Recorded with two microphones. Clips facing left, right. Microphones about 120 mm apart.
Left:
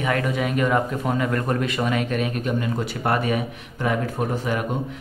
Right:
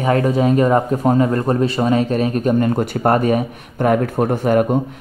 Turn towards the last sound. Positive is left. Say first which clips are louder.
# right 9 dB
turn(degrees=-45)  # may be behind; listen again after turning